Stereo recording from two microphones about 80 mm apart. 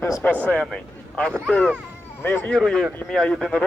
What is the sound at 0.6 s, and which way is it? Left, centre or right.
A man's voice, centre.